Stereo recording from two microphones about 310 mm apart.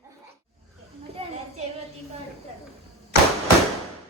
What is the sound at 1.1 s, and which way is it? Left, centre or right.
Children playing, centre.